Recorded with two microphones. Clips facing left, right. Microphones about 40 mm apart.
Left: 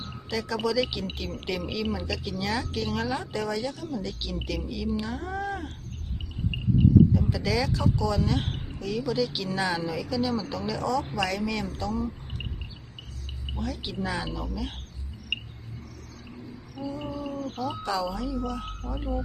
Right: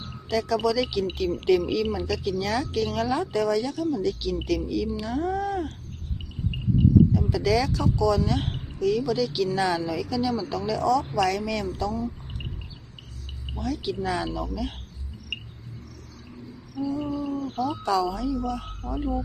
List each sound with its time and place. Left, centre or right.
0.0 s speech: centre
7.1 s speech: centre
7.3 s speech: centre
13.6 s speech: centre
16.3 s owl: centre
17.5 s speech: centre